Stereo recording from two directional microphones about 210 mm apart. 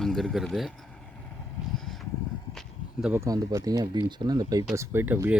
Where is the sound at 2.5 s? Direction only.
5° right (ahead or behind).